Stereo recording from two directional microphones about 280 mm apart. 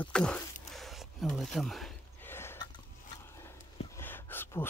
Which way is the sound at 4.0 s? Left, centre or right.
Centre.